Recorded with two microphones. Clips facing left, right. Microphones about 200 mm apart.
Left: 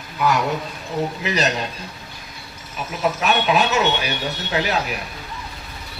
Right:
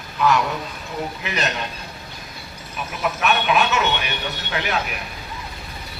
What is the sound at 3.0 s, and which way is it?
Speech, 35° left (ahead or behind).